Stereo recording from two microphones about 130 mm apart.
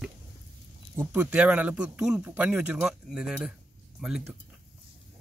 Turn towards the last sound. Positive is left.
turn(degrees=-5)  # may be behind; listen again after turning